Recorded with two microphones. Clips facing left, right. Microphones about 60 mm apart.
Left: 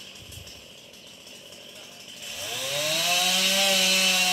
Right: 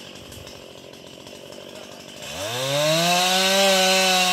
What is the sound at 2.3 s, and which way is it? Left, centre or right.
Chainsaw, right.